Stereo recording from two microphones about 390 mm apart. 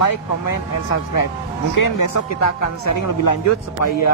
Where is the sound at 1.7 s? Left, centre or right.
Left.